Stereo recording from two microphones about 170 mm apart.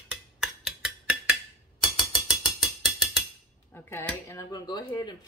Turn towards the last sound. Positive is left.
turn(degrees=25)  # may be behind; listen again after turning